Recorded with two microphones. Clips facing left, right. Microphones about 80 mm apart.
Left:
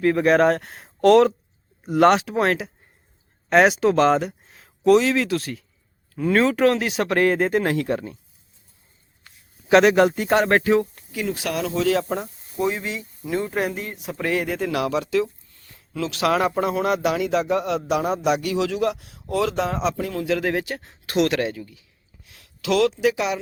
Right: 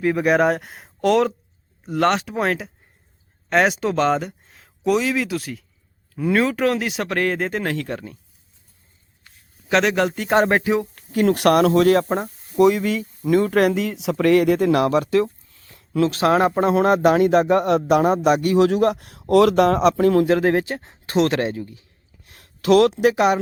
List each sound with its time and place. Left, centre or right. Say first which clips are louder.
0.0 s speech: left 1 dB; centre
9.6 s speech: left 4 dB; centre
10.5 s speech: left 1 dB; centre
11.1 s speech: right 11 dB; right
12.5 s speech: right 8 dB; right
15.5 s a sound: right 2 dB; right
15.8 s a man's voice: right 5 dB; right
20.2 s speech: right 5 dB; right